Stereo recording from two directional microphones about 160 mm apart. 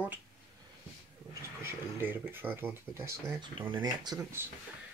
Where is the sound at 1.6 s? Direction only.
15° right (ahead or behind).